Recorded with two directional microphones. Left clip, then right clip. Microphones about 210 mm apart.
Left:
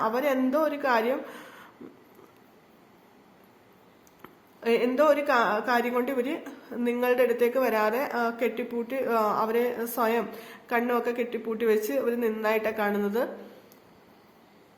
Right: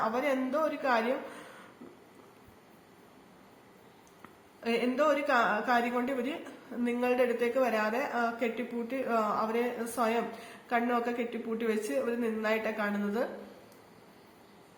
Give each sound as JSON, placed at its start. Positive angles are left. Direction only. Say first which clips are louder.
{"t": 0.0, "sound": "a woman's voice", "louder": "left 5 dB", "side_deg": 55}
{"t": 4.2, "sound": "a woman's voice", "louder": "left 6 dB", "side_deg": 50}